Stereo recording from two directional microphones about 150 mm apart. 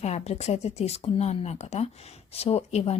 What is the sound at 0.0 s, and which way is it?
Speech, 45° left (ahead or behind).